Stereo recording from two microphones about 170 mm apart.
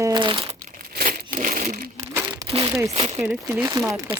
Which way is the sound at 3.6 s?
20° right (ahead or behind).